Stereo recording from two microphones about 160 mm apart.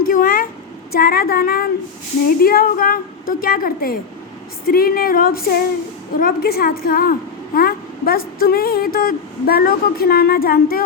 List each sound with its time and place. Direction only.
0.0 s a woman's voice: 65° left (ahead or behind)